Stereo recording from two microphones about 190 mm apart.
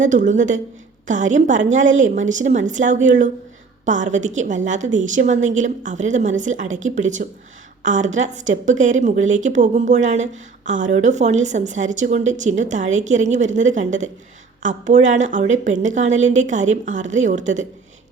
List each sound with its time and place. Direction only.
0.0 s a woman's voice: 40° right (ahead or behind)